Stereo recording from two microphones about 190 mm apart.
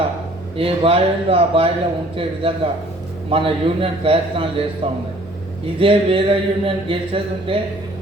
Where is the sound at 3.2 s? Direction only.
30° right (ahead or behind).